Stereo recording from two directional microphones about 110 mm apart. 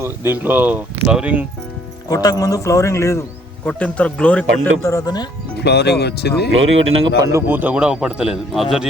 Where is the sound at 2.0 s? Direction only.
35° left (ahead or behind).